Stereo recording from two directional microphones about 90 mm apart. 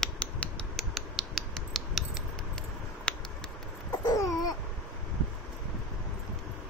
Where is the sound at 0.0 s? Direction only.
10° left (ahead or behind).